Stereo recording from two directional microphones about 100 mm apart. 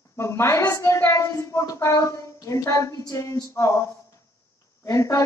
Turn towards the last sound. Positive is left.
turn(degrees=35)  # may be behind; listen again after turning